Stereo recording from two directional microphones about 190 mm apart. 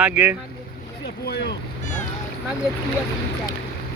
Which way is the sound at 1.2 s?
55° left (ahead or behind).